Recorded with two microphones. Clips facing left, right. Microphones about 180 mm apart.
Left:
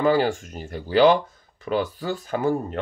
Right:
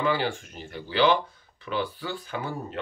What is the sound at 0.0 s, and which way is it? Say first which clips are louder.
Speech: left 6 dB; 45° left (ahead or behind).